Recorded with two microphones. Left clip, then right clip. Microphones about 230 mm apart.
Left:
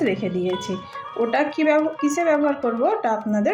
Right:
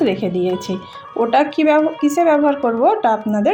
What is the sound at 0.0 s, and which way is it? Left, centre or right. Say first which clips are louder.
Speech: right 5 dB; centre.